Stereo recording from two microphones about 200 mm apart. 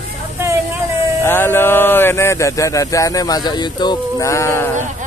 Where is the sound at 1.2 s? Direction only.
10° left (ahead or behind).